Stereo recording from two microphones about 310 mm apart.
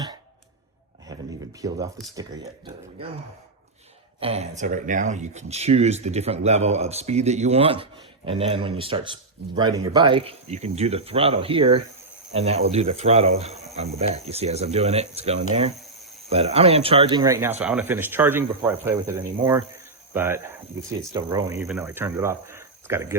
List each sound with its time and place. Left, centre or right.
1.6 s speech: centre
4.2 s speech: centre